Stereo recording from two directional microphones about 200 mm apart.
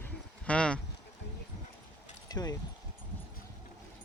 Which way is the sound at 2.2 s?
20° left (ahead or behind).